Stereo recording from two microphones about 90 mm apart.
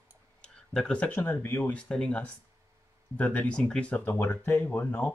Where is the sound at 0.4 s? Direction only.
10° left (ahead or behind).